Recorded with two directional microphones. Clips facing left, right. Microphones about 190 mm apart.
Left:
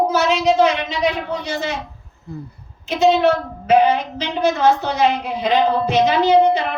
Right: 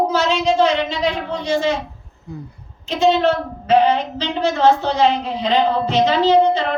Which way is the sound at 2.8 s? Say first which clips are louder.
Left 1 dB; 10° left (ahead or behind).